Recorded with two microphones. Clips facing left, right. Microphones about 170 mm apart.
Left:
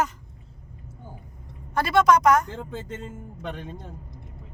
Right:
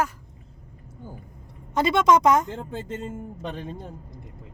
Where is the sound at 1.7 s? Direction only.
20° right (ahead or behind).